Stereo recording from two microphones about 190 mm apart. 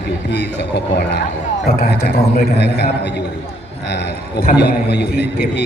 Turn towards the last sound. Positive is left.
turn(degrees=60)  # may be behind; listen again after turning